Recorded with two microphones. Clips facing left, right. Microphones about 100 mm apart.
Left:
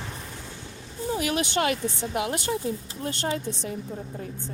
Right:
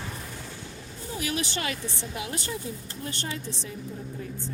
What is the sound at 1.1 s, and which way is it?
A woman's voice, 50° left (ahead or behind).